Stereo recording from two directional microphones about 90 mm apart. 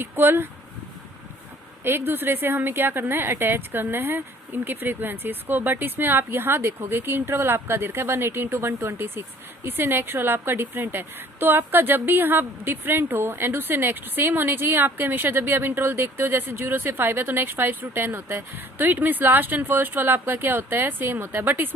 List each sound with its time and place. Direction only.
0.0 s a woman's voice: 25° right (ahead or behind)
1.8 s a woman's voice: 25° right (ahead or behind)